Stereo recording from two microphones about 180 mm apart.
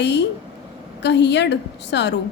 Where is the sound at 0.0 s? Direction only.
70° left (ahead or behind).